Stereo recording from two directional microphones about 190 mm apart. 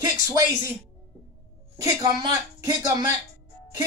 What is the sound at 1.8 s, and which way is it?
Speech, 15° right (ahead or behind).